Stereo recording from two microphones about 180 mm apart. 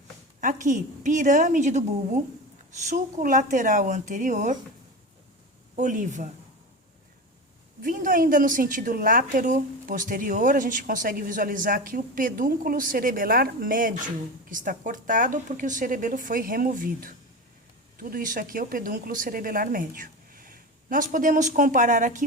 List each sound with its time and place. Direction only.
0.4 s speech: 45° right (ahead or behind)
5.7 s speech: 45° right (ahead or behind)
7.8 s speech: 50° right (ahead or behind)